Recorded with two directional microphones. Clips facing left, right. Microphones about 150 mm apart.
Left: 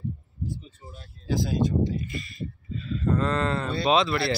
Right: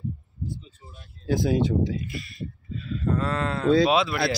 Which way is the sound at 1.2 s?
55° right (ahead or behind).